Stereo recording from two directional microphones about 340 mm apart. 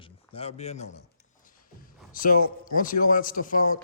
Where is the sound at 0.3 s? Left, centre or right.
Centre.